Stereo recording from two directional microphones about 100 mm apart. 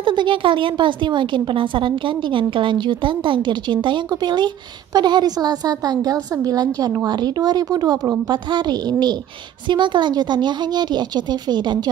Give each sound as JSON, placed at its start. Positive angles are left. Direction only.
{"t": 0.0, "sound": "a woman's voice", "side_deg": -55}